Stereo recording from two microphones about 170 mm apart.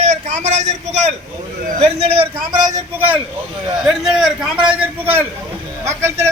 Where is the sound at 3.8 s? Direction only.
Centre (ahead or behind).